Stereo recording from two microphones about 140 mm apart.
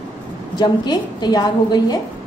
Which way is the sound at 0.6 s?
30° left (ahead or behind).